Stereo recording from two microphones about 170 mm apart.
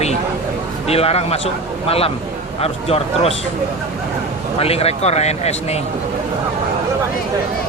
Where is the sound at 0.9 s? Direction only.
35° left (ahead or behind).